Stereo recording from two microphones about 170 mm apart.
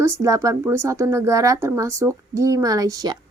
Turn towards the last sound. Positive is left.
turn(degrees=-20)  # may be behind; listen again after turning